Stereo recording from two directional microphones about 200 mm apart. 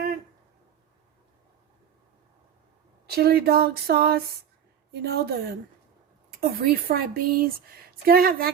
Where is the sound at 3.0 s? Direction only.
50° right (ahead or behind).